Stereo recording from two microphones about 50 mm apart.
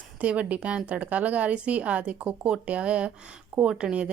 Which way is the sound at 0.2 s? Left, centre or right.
Right.